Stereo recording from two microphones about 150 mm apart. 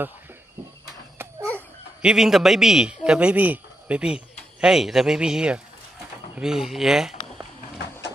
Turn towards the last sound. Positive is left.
turn(degrees=-5)  # may be behind; listen again after turning